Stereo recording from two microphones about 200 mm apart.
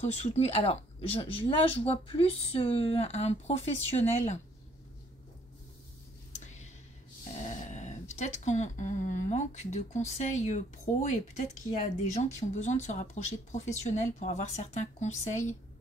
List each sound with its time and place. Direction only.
0.0 s speech: 35° left (ahead or behind)
6.3 s a sound: 35° left (ahead or behind)
7.3 s speech: 35° left (ahead or behind)